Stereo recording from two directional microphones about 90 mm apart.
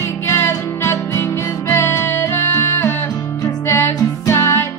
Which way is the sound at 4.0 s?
30° left (ahead or behind).